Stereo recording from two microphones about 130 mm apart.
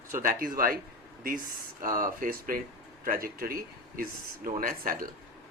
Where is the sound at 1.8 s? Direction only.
90° right.